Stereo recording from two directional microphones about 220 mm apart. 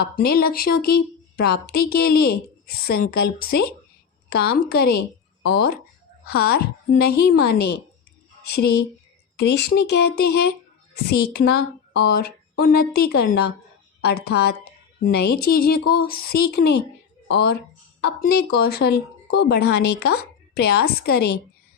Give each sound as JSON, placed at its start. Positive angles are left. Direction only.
{"t": 0.0, "sound": "a woman's voice", "side_deg": 45}